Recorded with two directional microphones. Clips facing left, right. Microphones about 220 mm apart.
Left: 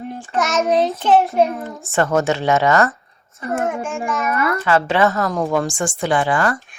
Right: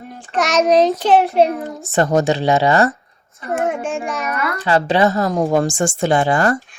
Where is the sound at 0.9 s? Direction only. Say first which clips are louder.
Right 3 dB; 35° right (ahead or behind).